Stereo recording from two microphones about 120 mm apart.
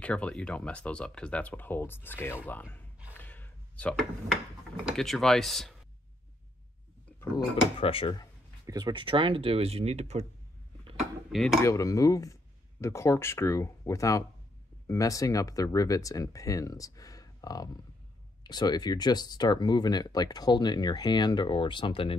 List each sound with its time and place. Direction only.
0.0 s speech: 10° left (ahead or behind)
3.2 s a sound: 15° left (ahead or behind)
4.8 s speech: centre (ahead or behind)
7.8 s speech: 50° left (ahead or behind)
8.6 s speech: 35° right (ahead or behind); by 10.2 s 60° right (ahead or behind)
11.0 s dishes: centre (ahead or behind)
11.6 s speech: 25° left (ahead or behind); by 22.1 s 45° left (ahead or behind)